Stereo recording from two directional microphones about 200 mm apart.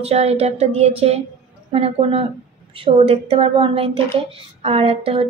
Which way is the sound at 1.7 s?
30° right (ahead or behind).